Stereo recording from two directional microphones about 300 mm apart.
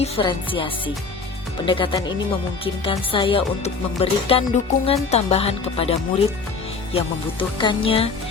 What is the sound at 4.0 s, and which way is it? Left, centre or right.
Speech, centre.